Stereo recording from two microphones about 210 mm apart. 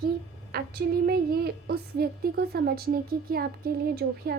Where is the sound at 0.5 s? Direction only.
45° right (ahead or behind).